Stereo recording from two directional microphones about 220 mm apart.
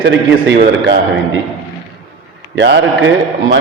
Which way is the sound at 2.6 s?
55° right (ahead or behind).